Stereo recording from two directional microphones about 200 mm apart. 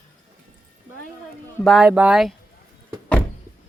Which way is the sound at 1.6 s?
5° right (ahead or behind).